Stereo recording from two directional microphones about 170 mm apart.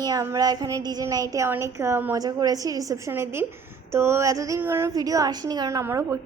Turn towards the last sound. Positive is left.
turn(degrees=-15)  # may be behind; listen again after turning